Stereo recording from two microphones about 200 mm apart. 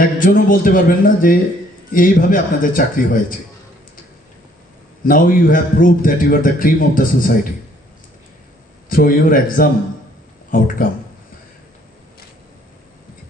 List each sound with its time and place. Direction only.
0.0 s a man's voice: 45° left (ahead or behind)
5.0 s a man's voice: 45° left (ahead or behind)
8.9 s a man's voice: 45° left (ahead or behind)